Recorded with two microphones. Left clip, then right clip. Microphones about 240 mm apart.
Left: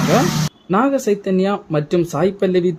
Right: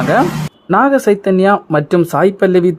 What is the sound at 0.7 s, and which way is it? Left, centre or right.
Speech, right.